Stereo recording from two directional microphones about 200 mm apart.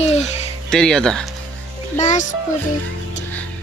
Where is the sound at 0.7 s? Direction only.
5° left (ahead or behind).